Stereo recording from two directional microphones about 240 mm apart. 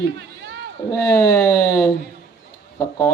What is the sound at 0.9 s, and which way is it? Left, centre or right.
Speech, centre.